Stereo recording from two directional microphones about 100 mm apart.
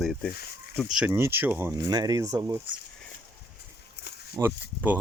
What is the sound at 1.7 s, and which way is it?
Speech, 40° right (ahead or behind).